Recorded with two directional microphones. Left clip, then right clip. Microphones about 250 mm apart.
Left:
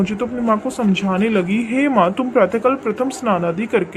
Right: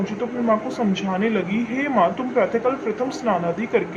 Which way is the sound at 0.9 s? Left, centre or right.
Left.